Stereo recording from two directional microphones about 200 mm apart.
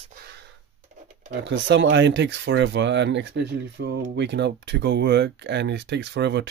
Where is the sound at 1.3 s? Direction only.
60° right (ahead or behind).